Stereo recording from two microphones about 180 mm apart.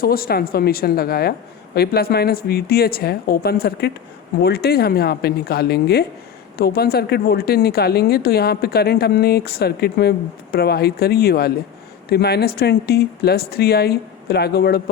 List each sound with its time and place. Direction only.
0.0 s a woman's voice: 55° left (ahead or behind)